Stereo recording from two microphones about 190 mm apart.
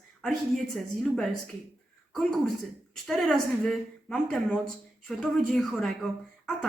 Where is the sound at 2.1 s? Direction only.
Centre (ahead or behind).